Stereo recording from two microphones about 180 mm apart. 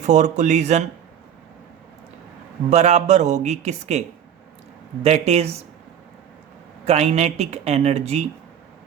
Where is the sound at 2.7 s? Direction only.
40° right (ahead or behind).